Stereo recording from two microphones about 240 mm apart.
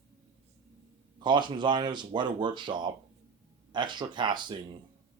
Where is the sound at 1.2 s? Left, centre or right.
Centre.